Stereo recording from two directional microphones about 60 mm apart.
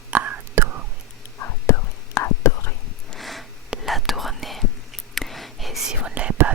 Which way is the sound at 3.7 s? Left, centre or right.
Centre.